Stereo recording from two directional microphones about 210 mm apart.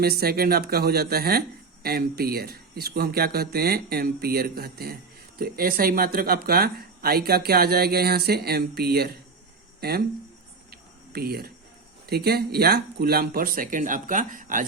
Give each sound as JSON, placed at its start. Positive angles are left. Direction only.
{"t": 0.0, "sound": "speech", "side_deg": -45}
{"t": 10.7, "sound": "a sound", "side_deg": -45}
{"t": 12.0, "sound": "speech", "side_deg": -50}